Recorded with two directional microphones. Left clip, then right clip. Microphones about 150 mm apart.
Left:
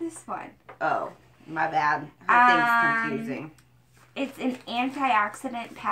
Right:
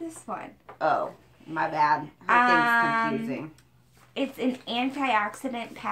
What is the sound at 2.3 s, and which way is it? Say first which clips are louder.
Speech: left 2 dB; 15° right (ahead or behind).